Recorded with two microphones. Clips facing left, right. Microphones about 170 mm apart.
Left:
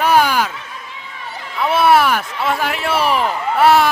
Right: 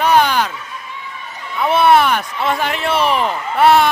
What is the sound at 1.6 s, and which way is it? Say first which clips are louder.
Speech: right 1 dB; 5° left (ahead or behind).